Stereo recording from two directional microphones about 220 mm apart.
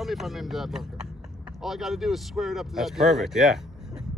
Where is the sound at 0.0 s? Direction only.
Centre (ahead or behind).